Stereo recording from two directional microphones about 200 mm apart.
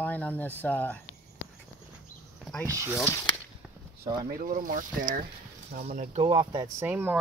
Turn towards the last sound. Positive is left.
turn(degrees=-10)  # may be behind; listen again after turning